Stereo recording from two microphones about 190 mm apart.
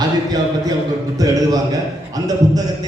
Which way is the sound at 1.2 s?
20° right (ahead or behind).